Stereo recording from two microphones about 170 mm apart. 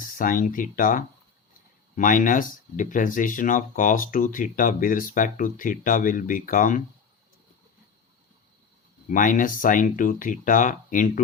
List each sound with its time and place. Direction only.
0.2 s speech: 55° left (ahead or behind)
9.0 s speech: 50° left (ahead or behind)